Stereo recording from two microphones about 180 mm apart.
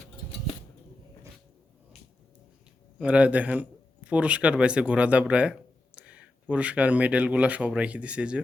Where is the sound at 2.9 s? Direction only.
5° right (ahead or behind).